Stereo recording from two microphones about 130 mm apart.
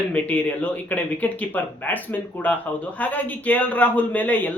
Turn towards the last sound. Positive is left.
turn(degrees=15)  # may be behind; listen again after turning